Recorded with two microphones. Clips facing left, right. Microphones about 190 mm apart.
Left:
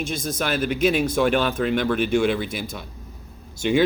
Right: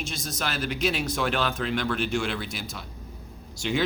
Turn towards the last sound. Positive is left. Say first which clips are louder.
# left 7 dB
turn(degrees=55)  # may be behind; listen again after turning